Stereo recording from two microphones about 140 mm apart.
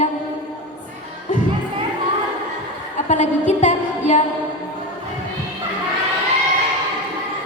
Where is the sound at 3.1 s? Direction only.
60° left (ahead or behind).